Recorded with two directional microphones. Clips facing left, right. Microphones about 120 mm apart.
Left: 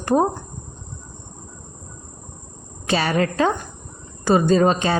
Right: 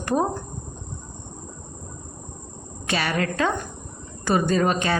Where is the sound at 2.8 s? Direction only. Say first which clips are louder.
Left 4 dB; 30° left (ahead or behind).